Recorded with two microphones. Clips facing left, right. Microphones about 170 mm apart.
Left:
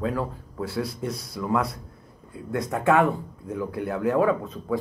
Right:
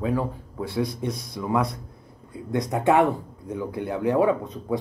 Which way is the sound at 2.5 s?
15° right (ahead or behind).